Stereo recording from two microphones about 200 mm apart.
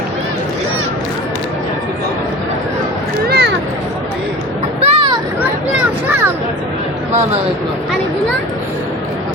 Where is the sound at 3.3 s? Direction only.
55° right (ahead or behind).